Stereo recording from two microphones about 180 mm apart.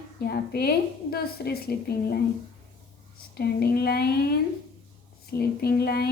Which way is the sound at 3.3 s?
60° left (ahead or behind).